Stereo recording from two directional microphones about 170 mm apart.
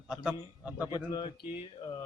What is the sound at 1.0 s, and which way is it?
Speech, 30° left (ahead or behind).